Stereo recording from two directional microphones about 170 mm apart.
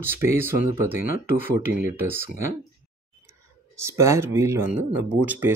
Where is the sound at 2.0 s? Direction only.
15° right (ahead or behind).